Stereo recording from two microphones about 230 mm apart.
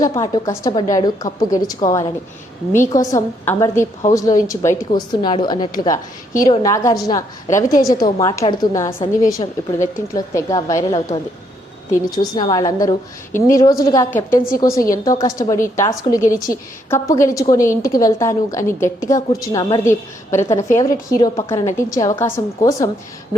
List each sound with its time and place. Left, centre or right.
0.0 s a woman's voice: centre
9.0 s a woman's voice: left